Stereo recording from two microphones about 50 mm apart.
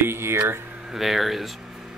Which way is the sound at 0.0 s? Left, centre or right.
Right.